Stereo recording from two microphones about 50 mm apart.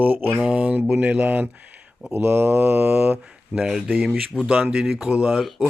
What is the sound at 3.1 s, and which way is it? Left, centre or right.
Speech, centre.